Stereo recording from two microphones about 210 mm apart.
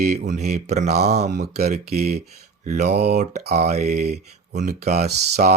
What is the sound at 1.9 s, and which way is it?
Speech, 30° right (ahead or behind).